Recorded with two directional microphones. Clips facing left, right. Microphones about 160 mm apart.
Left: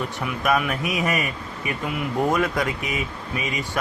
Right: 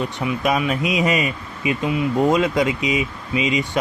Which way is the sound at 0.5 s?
15° right (ahead or behind).